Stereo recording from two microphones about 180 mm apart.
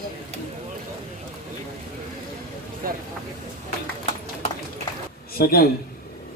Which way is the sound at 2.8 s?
50° right (ahead or behind).